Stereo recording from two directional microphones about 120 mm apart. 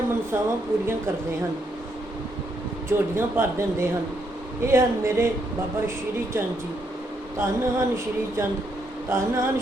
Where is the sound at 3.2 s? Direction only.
20° right (ahead or behind).